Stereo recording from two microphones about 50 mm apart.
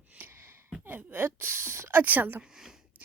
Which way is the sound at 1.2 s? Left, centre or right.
Right.